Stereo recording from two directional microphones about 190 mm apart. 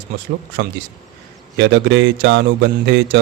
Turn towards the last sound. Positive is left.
turn(degrees=-65)  # may be behind; listen again after turning